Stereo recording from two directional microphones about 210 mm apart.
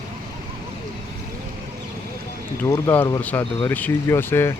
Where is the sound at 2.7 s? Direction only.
10° left (ahead or behind).